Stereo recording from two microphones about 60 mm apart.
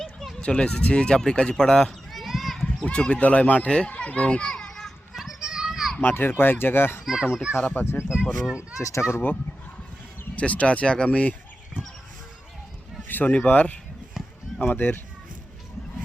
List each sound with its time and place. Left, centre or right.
0.0 s a sound: centre
0.4 s speech: centre
2.1 s clip-clop: centre
2.6 s a child's voice: centre
5.1 s children playing: centre
6.0 s a child's voice: left
7.0 s a child's voice: centre
7.6 s a child's voice: left
8.0 s speech: centre
8.8 s speech: left
9.1 s a child's voice: left
10.3 s speech: left
13.1 s a sound: left
13.4 s a child's voice: left